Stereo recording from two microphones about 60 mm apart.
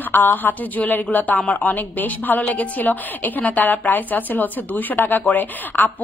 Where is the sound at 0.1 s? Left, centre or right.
Left.